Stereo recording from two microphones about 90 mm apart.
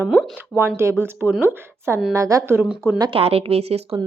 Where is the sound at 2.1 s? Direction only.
40° right (ahead or behind).